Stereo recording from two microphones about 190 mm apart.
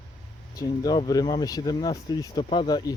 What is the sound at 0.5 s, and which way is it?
Speech, 20° left (ahead or behind).